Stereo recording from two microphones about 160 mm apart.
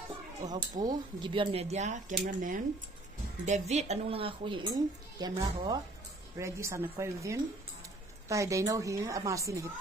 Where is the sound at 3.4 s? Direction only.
45° right (ahead or behind).